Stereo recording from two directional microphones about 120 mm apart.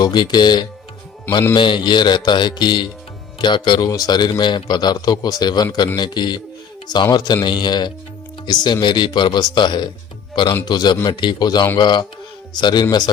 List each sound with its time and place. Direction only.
0.0 s a man's voice: 35° left (ahead or behind)